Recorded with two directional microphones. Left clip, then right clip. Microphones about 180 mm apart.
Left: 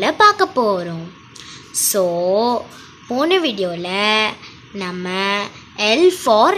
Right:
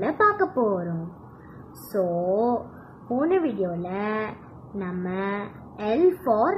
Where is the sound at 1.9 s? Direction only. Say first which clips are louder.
Left 7 dB; 35° left (ahead or behind).